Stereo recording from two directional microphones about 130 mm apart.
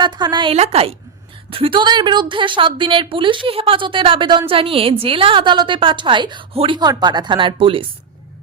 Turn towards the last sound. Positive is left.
turn(degrees=-45)  # may be behind; listen again after turning